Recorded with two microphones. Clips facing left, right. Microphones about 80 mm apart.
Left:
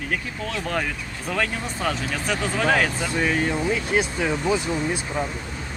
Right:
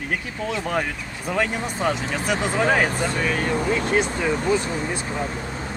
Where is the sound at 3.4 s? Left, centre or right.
Right.